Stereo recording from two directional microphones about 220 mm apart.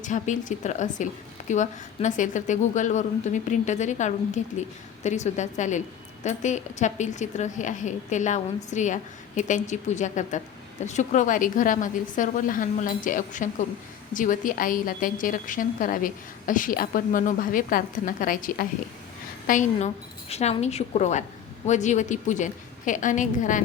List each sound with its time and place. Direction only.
0.0 s a woman's voice: 35° left (ahead or behind)